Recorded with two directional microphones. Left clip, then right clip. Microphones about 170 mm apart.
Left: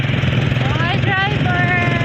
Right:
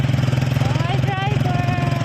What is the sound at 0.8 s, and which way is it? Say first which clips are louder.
Vehicle: left 9 dB; 15° left (ahead or behind).